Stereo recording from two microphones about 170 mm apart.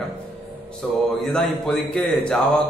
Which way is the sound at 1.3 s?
5° left (ahead or behind).